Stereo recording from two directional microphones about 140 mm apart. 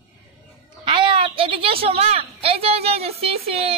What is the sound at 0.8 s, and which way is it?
A woman's voice, 35° right (ahead or behind).